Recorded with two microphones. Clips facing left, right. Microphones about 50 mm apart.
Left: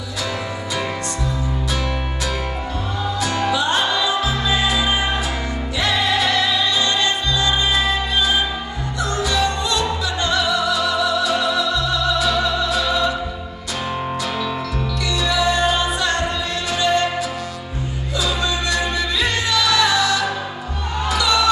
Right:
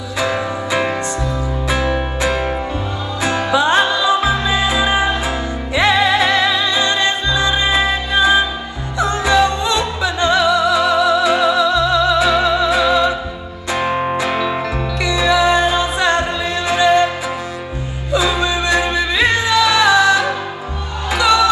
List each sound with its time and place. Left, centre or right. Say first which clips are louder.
1.7 s music: right 6 dB; right
13.7 s music: right 6 dB; right
18.1 s music: right 6 dB; right